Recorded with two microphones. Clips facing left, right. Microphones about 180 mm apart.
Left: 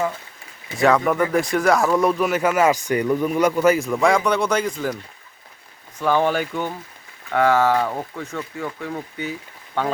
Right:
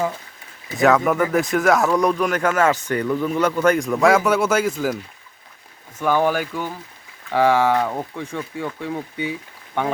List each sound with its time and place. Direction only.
0.7 s speech: centre (ahead or behind)
6.0 s speech: 10° right (ahead or behind)
7.3 s speech: 15° right (ahead or behind)
7.7 s speech: centre (ahead or behind)
8.2 s speech: 10° right (ahead or behind)